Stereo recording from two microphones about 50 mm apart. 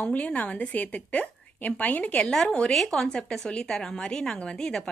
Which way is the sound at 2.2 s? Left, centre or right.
Centre.